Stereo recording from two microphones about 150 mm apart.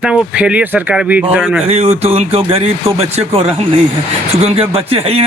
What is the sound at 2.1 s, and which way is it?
A man's voice, 40° right (ahead or behind).